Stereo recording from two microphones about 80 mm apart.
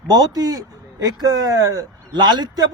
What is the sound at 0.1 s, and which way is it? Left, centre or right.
Speech, right.